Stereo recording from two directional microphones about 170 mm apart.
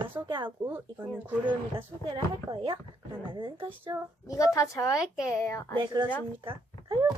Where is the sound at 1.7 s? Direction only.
30° right (ahead or behind).